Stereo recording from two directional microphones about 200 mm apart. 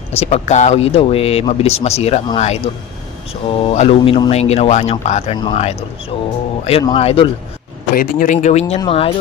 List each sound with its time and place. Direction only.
0.1 s speech: 30° left (ahead or behind)
7.9 s speech: 45° left (ahead or behind); by 9.1 s 25° left (ahead or behind)